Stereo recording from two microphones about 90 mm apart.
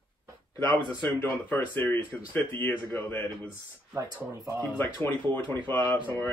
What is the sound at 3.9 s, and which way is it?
Speech, 40° right (ahead or behind).